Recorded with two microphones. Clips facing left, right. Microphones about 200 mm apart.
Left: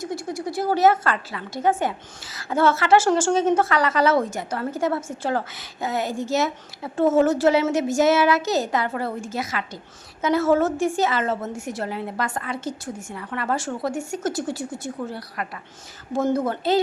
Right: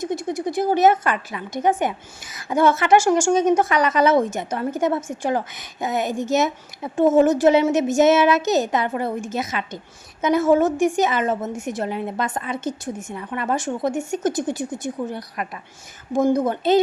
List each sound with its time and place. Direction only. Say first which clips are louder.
0.0 s a woman's voice: right 4 dB; 20° right (ahead or behind)